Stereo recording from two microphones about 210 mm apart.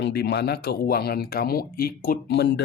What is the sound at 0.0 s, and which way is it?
Speech, 50° left (ahead or behind).